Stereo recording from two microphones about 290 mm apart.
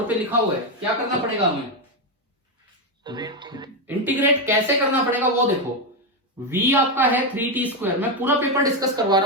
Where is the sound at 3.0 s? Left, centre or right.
Centre.